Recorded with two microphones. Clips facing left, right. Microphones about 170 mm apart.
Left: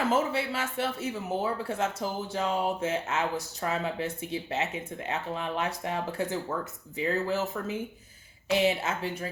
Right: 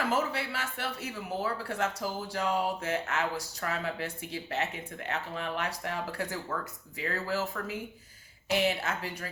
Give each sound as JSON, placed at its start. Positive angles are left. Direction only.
{"t": 0.1, "sound": "speech", "side_deg": 25}